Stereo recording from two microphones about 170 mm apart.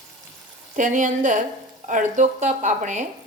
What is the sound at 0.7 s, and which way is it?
Speech, 50° right (ahead or behind).